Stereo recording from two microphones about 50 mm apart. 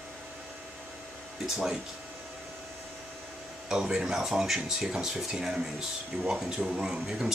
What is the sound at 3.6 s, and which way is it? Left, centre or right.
Speech, centre.